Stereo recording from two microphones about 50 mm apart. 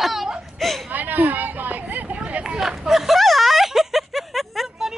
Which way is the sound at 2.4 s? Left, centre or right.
Centre.